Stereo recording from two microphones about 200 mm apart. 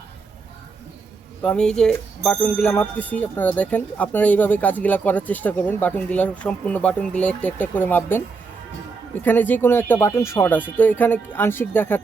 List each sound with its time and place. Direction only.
1.4 s speech: 5° left (ahead or behind)